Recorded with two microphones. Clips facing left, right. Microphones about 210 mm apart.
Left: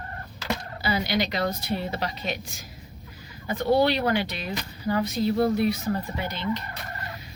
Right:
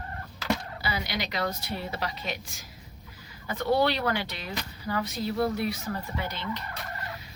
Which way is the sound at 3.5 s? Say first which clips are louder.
Left 3 dB; 15° left (ahead or behind).